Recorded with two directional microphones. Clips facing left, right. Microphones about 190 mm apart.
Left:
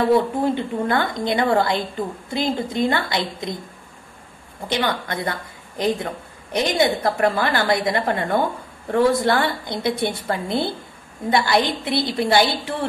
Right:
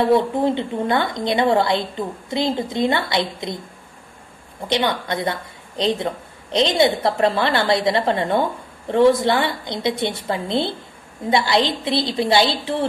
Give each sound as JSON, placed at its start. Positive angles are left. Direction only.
{"t": 0.2, "sound": "a woman's voice", "side_deg": -20}
{"t": 4.6, "sound": "a woman's voice", "side_deg": -20}